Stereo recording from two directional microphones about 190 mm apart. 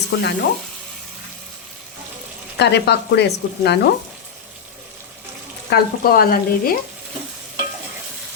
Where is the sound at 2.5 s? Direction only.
60° left (ahead or behind).